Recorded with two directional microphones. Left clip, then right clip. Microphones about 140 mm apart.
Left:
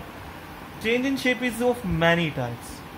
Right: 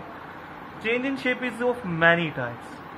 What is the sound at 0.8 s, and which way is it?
Speech, 55° left (ahead or behind).